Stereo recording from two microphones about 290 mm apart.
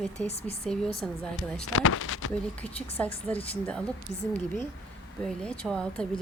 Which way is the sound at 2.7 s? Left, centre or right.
Left.